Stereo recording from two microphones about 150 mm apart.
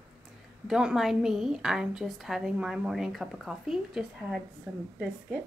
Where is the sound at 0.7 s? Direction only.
5° right (ahead or behind).